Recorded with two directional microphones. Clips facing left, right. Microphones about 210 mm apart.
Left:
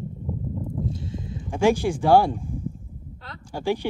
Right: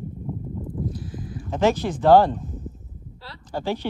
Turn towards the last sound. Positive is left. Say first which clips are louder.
# left 1 dB
turn(degrees=10)  # may be behind; listen again after turning